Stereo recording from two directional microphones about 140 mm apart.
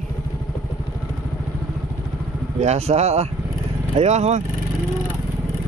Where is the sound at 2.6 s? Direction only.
50° right (ahead or behind).